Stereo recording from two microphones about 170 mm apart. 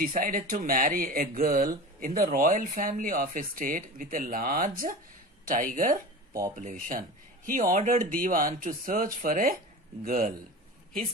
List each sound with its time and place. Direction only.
0.0 s speech: 55° right (ahead or behind)